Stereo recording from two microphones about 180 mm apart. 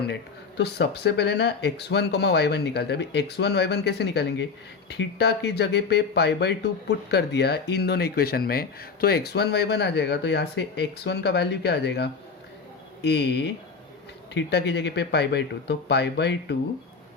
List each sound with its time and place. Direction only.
0.1 s speech: 70° left (ahead or behind)
14.3 s speech: 75° left (ahead or behind)